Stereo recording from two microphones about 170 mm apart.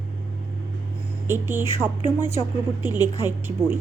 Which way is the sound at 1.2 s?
15° right (ahead or behind).